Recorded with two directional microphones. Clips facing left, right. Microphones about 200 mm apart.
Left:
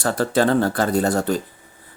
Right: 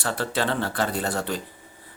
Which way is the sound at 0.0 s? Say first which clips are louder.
Left 8 dB; 45° left (ahead or behind).